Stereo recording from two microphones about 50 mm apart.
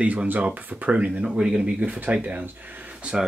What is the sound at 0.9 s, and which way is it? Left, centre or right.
Speech, right.